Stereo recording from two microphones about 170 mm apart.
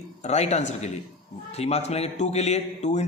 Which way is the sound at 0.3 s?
40° left (ahead or behind).